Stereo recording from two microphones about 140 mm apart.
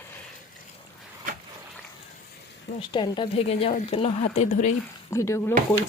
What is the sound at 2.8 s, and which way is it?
Speech, 35° left (ahead or behind).